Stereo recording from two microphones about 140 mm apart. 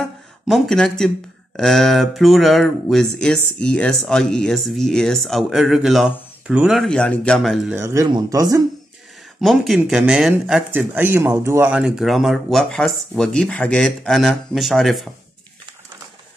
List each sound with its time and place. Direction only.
0.0 s a sound: centre (ahead or behind)
1.6 s speech: centre (ahead or behind)
7.7 s speech: 20° right (ahead or behind)
9.4 s speech: centre (ahead or behind)
10.7 s speech: 15° right (ahead or behind)
11.7 s speech: 5° right (ahead or behind)